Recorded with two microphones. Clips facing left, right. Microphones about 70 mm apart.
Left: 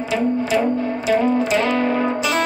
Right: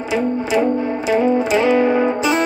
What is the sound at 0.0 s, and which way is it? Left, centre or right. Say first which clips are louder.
Music: right 1 dB; centre.